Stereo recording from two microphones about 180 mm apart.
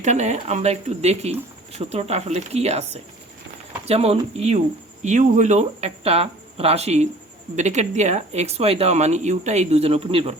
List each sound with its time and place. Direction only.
0.0 s speech: 40° right (ahead or behind)